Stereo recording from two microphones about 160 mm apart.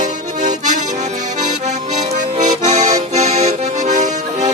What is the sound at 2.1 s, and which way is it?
Accordion, 45° right (ahead or behind).